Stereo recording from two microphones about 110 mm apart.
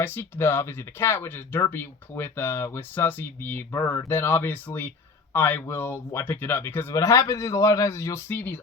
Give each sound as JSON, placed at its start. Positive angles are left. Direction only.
{"t": 0.0, "sound": "speech", "side_deg": 20}
{"t": 6.9, "sound": "speech", "side_deg": 30}